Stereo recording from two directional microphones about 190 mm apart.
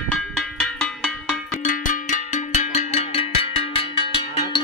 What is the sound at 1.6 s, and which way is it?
Cowbell, 45° left (ahead or behind).